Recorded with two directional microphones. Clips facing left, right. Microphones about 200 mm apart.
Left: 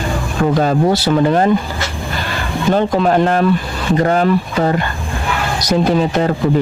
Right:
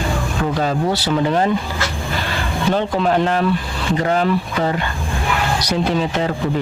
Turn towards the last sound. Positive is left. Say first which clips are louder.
# left 5 dB
turn(degrees=45)  # may be behind; listen again after turning